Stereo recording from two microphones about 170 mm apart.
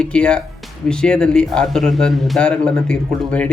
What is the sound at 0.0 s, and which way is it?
Speech, 5° left (ahead or behind).